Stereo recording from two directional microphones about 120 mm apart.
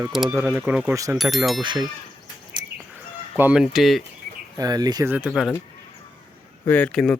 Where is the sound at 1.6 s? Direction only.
40° right (ahead or behind).